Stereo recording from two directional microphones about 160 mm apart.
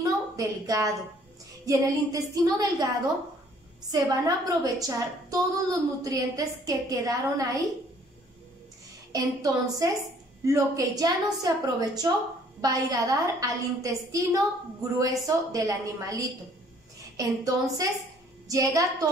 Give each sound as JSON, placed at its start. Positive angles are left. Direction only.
{"t": 0.0, "sound": "a sound", "side_deg": -20}
{"t": 1.7, "sound": "a woman's voice", "side_deg": -20}
{"t": 3.9, "sound": "a woman's voice", "side_deg": -20}
{"t": 9.1, "sound": "a woman's voice", "side_deg": -20}